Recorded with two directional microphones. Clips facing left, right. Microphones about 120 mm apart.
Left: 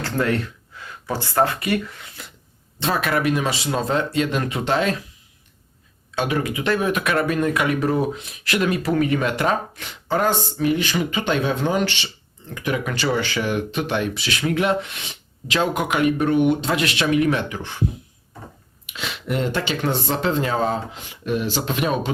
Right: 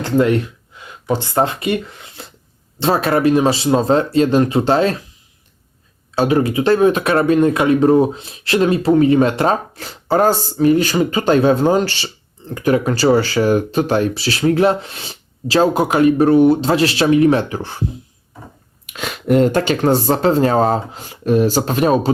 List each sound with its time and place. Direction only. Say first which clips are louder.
0.0 s speech: right 7 dB; 20° right (ahead or behind); by 5.0 s 35° right (ahead or behind)
6.1 s speech: right 8 dB; 30° right (ahead or behind)
18.9 s speech: right 10 dB; 45° right (ahead or behind)